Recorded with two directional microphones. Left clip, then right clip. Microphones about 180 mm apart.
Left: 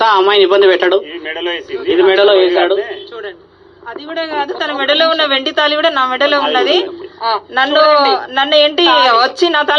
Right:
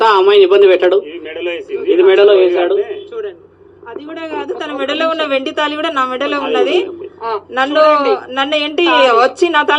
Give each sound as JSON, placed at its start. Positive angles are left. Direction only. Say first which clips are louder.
{"t": 0.0, "sound": "a woman's voice", "louder": "right 1 dB", "side_deg": 30}